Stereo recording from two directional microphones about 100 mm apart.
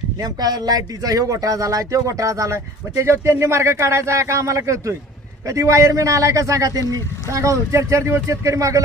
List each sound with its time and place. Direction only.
0.2 s speech: 40° right (ahead or behind)